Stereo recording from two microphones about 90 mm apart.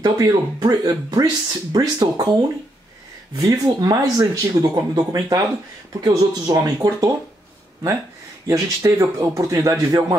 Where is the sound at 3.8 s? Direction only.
45° right (ahead or behind).